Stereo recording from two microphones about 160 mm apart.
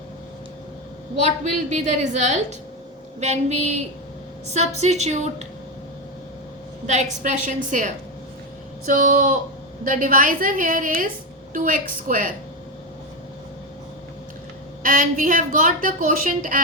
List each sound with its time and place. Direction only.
1.7 s a woman's voice: 50° right (ahead or behind)
6.8 s a woman's voice: 45° right (ahead or behind)
14.8 s a woman's voice: 60° right (ahead or behind)